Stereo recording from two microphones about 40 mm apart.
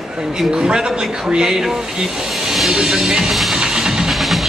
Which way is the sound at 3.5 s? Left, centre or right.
Centre.